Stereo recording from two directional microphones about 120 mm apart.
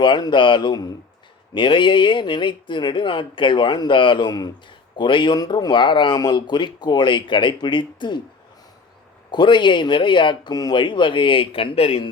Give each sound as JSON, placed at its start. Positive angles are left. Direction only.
{"t": 0.0, "sound": "speech", "side_deg": 40}
{"t": 9.3, "sound": "speech", "side_deg": 40}